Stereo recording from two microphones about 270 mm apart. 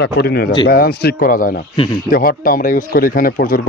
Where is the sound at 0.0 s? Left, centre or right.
Left.